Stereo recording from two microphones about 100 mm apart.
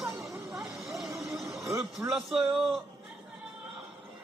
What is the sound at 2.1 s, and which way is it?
Speech, 5° right (ahead or behind).